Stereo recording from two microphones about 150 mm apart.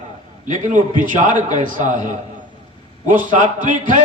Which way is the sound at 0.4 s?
60° right (ahead or behind).